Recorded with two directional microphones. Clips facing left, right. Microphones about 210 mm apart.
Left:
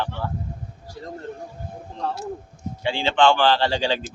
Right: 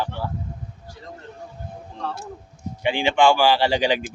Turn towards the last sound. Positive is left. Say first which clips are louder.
# right 2 dB
turn(degrees=-15)  # may be behind; listen again after turning